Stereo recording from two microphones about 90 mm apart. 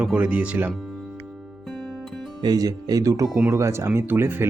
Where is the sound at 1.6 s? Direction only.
5° left (ahead or behind).